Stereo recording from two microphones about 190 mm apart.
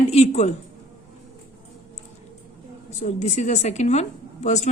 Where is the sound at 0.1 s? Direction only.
35° left (ahead or behind).